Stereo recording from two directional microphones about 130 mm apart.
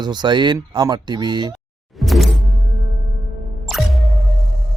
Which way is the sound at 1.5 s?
Centre (ahead or behind).